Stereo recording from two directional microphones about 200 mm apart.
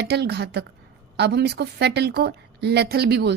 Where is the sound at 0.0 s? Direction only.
55° right (ahead or behind).